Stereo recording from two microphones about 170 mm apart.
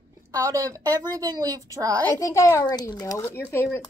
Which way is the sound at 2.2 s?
20° left (ahead or behind).